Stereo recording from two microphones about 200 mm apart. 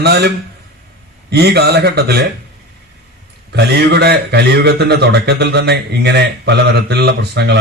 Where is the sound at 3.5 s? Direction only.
55° right (ahead or behind).